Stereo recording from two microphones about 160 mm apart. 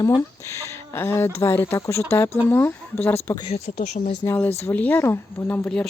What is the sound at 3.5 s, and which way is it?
Speech, 45° left (ahead or behind).